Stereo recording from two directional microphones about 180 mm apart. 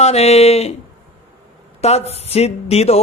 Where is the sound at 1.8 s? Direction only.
35° left (ahead or behind).